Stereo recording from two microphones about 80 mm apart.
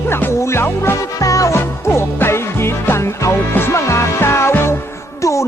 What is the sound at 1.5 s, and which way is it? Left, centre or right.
Music, left.